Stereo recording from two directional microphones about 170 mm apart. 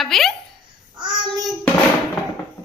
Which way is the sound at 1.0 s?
25° right (ahead or behind).